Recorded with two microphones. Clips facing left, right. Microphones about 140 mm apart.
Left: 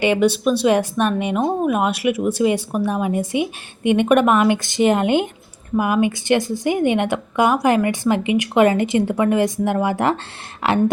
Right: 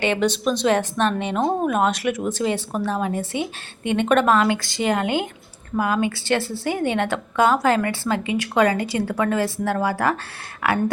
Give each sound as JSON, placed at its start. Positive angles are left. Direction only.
{"t": 0.0, "sound": "a woman's voice", "side_deg": 10}